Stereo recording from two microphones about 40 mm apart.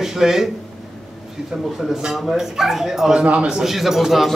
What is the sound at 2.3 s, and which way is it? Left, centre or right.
A man's voice, centre.